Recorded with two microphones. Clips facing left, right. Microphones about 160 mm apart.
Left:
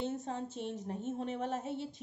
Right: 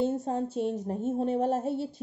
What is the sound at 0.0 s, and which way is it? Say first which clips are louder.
A woman's voice: right 9 dB; 35° right (ahead or behind).